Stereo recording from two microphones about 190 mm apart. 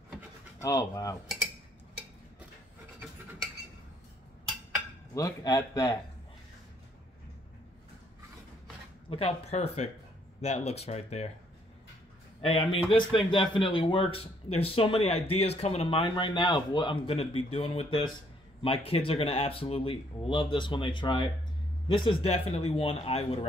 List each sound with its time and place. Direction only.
0.6 s speech: 20° left (ahead or behind)
5.1 s speech: 20° left (ahead or behind)
9.1 s a man's voice: 35° left (ahead or behind)
12.4 s a man's voice: 30° left (ahead or behind)